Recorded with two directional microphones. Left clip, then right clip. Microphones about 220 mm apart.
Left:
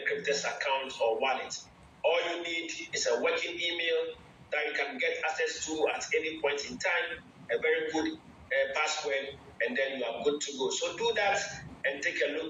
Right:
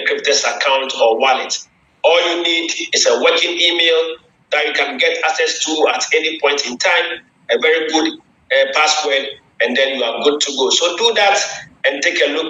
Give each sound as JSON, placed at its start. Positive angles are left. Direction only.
{"t": 0.0, "sound": "speech", "side_deg": -45}